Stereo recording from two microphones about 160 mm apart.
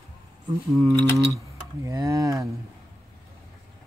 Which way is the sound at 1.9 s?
20° right (ahead or behind).